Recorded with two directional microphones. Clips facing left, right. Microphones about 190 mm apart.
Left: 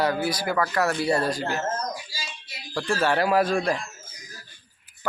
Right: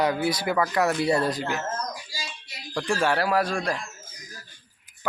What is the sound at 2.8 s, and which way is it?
Speech, 15° right (ahead or behind).